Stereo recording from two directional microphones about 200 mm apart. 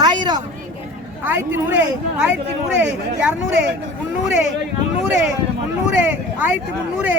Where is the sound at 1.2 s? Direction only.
10° right (ahead or behind).